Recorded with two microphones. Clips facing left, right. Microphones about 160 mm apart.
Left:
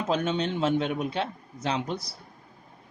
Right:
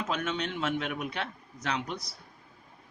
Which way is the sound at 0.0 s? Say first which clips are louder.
Left 6 dB; 30° left (ahead or behind).